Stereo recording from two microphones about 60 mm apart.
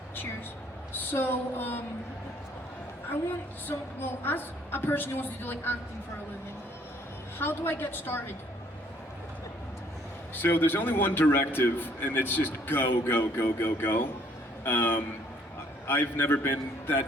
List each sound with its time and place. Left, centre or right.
1.1 s a man's voice: left
3.7 s a man's voice: left
7.3 s a man's voice: left
10.3 s a man's voice: left